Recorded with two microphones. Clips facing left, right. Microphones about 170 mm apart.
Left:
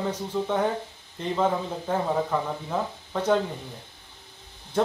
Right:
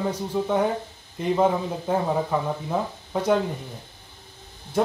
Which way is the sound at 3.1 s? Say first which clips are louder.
Right 2 dB; 10° right (ahead or behind).